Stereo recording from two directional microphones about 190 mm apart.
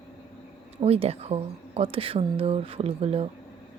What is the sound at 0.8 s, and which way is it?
Speech, 30° right (ahead or behind).